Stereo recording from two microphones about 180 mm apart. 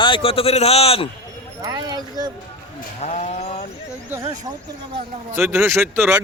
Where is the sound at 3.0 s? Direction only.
40° left (ahead or behind).